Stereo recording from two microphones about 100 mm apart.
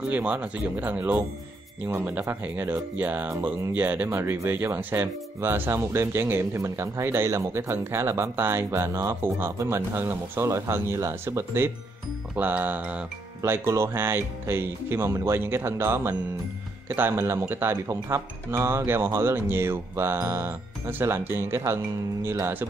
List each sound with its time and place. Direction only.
0.1 s speech: 15° right (ahead or behind)
13.4 s speech: 25° right (ahead or behind)